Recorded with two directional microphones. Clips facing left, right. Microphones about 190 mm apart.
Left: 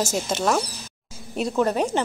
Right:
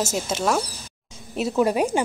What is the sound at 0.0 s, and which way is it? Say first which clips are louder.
A woman's voice: even; 5° right (ahead or behind).